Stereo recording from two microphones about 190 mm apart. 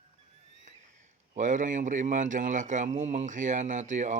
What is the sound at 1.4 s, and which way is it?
Speech, 40° right (ahead or behind).